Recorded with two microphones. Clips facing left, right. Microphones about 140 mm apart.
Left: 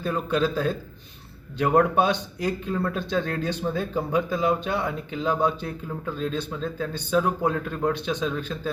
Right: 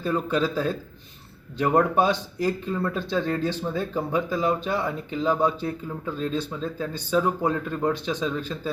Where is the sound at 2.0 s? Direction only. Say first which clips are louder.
Right 1 dB; 35° right (ahead or behind).